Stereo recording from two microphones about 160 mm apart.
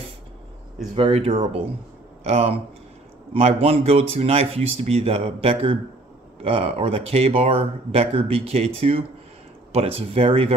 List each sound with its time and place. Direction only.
0.9 s speech: 35° right (ahead or behind)